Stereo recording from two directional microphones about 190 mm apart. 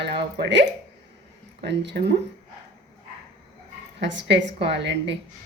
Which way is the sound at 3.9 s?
70° right (ahead or behind).